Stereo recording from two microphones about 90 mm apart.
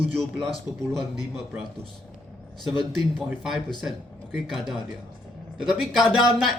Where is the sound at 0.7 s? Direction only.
50° left (ahead or behind).